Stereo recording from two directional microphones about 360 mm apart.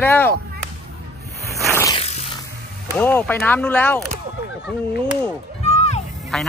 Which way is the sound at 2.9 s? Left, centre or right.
Centre.